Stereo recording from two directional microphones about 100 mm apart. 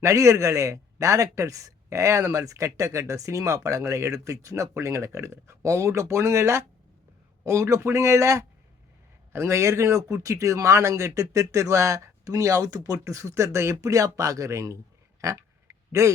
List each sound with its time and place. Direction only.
0.0 s a man's voice: 30° right (ahead or behind)
15.2 s oink: 30° right (ahead or behind)